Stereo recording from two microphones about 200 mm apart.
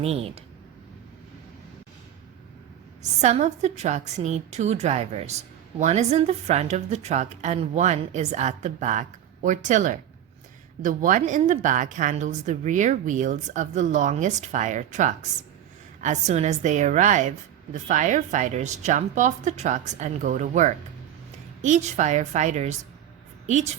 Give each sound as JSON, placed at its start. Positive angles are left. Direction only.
{"t": 0.0, "sound": "speech", "side_deg": -30}
{"t": 3.0, "sound": "a woman's voice", "side_deg": -35}